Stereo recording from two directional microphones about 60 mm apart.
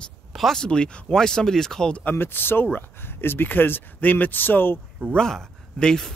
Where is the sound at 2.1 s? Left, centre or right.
Left.